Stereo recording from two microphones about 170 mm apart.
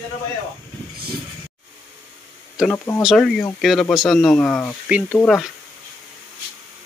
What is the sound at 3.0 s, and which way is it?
Speech, centre (ahead or behind).